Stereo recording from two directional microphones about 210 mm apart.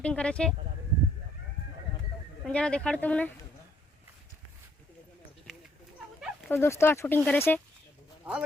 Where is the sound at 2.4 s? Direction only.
5° left (ahead or behind).